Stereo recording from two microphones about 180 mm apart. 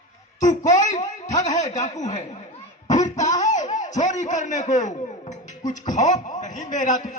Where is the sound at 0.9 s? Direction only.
40° left (ahead or behind).